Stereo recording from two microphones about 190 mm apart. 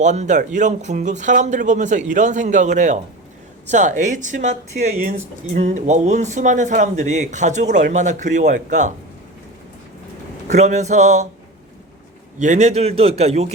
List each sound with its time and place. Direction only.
0.0 s speech: 40° right (ahead or behind)
10.5 s speech: 40° right (ahead or behind)
12.4 s speech: 40° right (ahead or behind)